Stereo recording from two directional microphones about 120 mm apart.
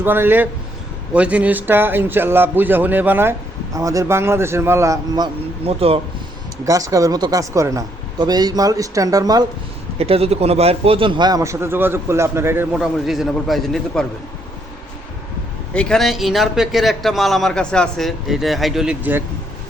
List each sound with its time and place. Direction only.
0.0 s a man's voice: 15° right (ahead or behind)
5.6 s speech: 55° right (ahead or behind)
6.7 s speech: 30° right (ahead or behind)
10.0 s a man's voice: 55° right (ahead or behind); by 12.6 s 20° right (ahead or behind)
12.7 s a man's voice: 5° right (ahead or behind)
15.7 s a man's voice: 5° left (ahead or behind)